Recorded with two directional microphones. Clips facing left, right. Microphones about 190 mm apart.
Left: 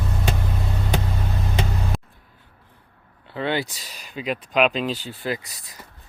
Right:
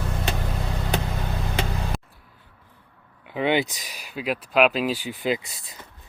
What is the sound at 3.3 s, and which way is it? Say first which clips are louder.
Speech: right 3 dB; 15° right (ahead or behind).